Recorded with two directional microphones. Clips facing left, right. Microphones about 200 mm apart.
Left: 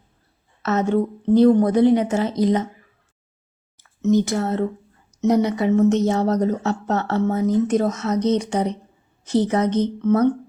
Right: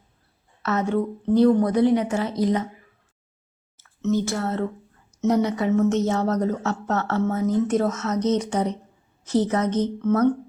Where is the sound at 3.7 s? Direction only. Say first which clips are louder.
Left 5 dB; 15° left (ahead or behind).